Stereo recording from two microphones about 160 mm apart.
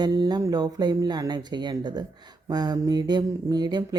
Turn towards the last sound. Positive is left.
turn(degrees=-25)  # may be behind; listen again after turning